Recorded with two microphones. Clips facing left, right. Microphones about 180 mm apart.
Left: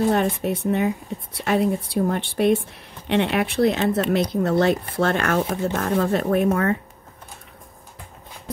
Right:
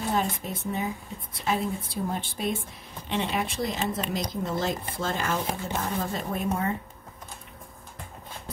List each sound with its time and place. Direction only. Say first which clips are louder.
0.1 s a woman's voice: left 7 dB; 70° left (ahead or behind)